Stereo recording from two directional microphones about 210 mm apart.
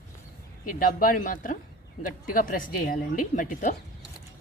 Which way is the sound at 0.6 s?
40° left (ahead or behind).